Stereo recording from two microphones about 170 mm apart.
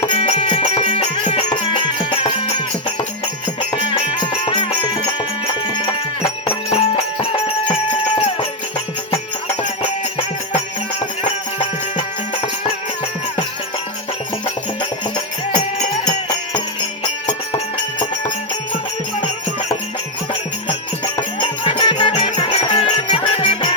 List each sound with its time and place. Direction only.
0.1 s music: 35° left (ahead or behind)
11.9 s music: 30° left (ahead or behind)
14.4 s music: 25° left (ahead or behind)
21.3 s music: 30° left (ahead or behind)